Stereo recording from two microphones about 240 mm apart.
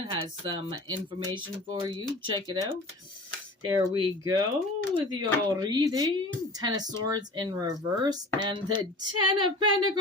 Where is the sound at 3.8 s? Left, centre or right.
Centre.